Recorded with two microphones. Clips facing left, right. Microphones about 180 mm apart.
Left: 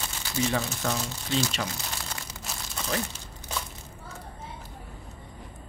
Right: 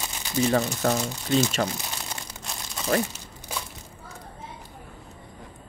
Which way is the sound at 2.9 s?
50° right (ahead or behind).